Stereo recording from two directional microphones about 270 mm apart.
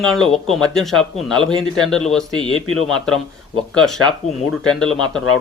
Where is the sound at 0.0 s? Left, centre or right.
Centre.